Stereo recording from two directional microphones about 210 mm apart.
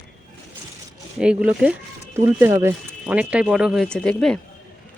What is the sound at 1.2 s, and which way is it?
Speech, 5° right (ahead or behind).